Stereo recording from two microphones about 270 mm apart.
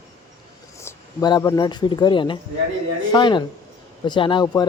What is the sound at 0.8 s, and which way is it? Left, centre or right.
Speech, centre.